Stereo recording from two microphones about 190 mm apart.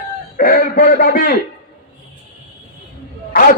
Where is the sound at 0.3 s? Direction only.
50° left (ahead or behind).